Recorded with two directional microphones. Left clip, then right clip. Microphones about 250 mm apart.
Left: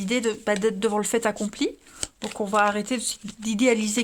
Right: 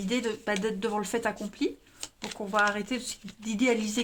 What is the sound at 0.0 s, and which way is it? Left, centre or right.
Speech, left.